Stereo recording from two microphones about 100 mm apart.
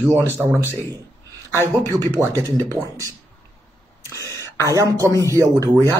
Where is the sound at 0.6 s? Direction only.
25° left (ahead or behind).